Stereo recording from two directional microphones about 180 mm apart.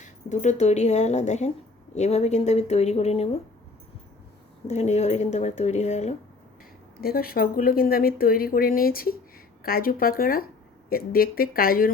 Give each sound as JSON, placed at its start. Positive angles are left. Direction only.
{"t": 0.0, "sound": "speech", "side_deg": 40}
{"t": 4.7, "sound": "speech", "side_deg": 40}
{"t": 7.0, "sound": "speech", "side_deg": 55}